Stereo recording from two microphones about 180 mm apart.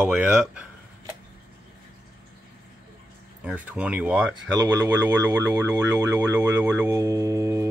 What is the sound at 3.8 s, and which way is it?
Speech, 5° right (ahead or behind).